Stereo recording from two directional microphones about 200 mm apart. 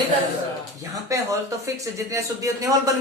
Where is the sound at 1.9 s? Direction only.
15° right (ahead or behind).